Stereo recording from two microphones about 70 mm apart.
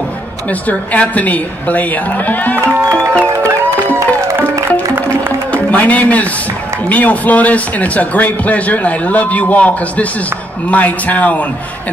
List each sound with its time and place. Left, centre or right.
0.5 s a man's voice: left
2.6 s music: right
3.9 s music: right
5.5 s a man's voice: left